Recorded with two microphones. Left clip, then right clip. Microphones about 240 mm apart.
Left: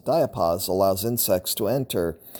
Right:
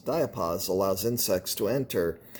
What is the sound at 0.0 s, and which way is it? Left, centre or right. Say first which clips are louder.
Speech: left 7 dB; left.